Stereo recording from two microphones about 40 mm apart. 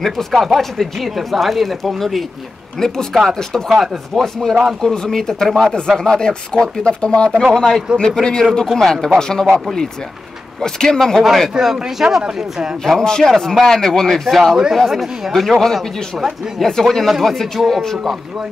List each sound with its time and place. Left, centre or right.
0.0 s speech: centre
2.8 s speech: centre
3.6 s speech: centre
4.1 s speech: centre
10.6 s speech: centre
11.5 s speech: centre
12.8 s speech: centre
14.6 s speech: centre